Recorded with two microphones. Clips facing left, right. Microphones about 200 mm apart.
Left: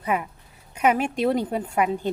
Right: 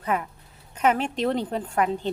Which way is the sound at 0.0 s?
10° left (ahead or behind).